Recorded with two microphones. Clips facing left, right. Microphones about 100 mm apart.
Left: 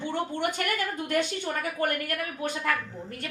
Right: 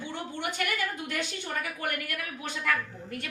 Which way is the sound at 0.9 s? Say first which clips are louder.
Left 7 dB; 50° left (ahead or behind).